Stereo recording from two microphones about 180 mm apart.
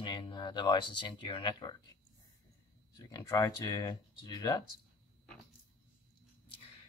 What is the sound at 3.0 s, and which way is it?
Speech, 20° left (ahead or behind).